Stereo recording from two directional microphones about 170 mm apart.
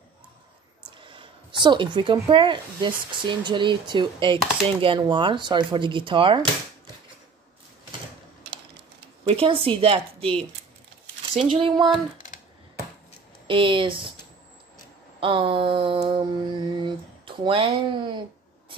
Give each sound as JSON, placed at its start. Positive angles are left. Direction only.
{"t": 0.8, "sound": "speech", "side_deg": -30}
{"t": 9.3, "sound": "mantra", "side_deg": -30}
{"t": 11.5, "sound": "mantra", "side_deg": -30}
{"t": 13.5, "sound": "speech", "side_deg": -30}
{"t": 15.1, "sound": "mantra", "side_deg": -30}